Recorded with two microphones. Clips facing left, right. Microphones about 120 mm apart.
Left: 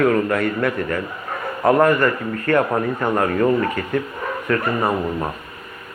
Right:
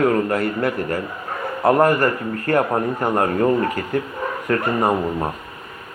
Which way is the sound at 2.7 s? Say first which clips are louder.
Even; 25° right (ahead or behind).